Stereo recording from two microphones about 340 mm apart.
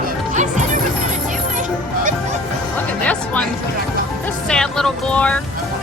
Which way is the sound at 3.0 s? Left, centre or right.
Centre.